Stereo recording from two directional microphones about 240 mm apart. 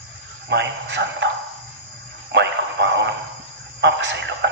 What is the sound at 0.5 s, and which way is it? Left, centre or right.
Speech, right.